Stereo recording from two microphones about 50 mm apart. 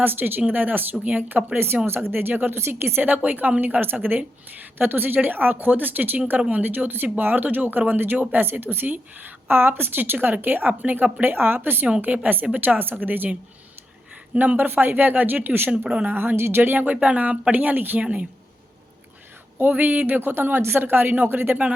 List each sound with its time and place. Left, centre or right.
0.0 s speech: right
1.5 s speech: right
2.6 s speech: right
3.2 s speech: right
8.6 s speech: right
14.3 s speech: right
15.9 s a woman's voice: right
16.1 s speech: right
18.0 s a woman's voice: right
19.5 s speech: right